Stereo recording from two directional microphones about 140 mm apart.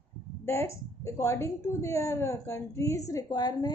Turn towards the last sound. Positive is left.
turn(degrees=30)  # may be behind; listen again after turning